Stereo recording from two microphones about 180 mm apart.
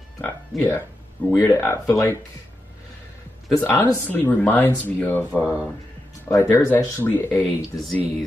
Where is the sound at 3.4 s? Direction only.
10° left (ahead or behind).